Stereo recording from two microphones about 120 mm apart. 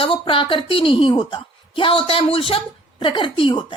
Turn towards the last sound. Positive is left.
turn(degrees=45)  # may be behind; listen again after turning